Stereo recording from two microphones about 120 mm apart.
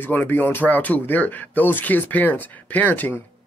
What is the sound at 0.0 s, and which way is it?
Speech, 15° left (ahead or behind).